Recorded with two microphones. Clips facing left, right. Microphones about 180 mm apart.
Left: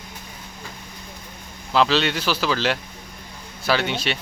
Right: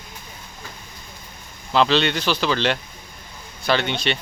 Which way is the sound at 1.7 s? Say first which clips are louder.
Right 1 dB; 5° left (ahead or behind).